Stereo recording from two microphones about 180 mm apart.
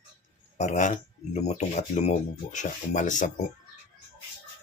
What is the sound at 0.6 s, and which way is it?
Speech, 40° left (ahead or behind).